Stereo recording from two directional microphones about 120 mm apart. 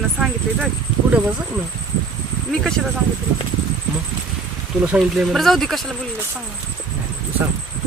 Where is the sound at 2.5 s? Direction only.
Centre (ahead or behind).